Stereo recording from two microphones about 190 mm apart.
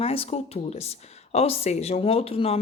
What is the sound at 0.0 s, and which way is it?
Speech, 30° left (ahead or behind).